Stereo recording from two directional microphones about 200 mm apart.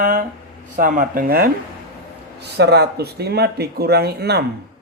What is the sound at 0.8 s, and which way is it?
Speech, 45° right (ahead or behind).